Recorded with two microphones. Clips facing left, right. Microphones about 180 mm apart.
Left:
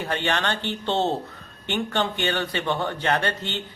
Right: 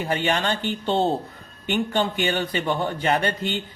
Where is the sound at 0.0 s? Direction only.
10° right (ahead or behind).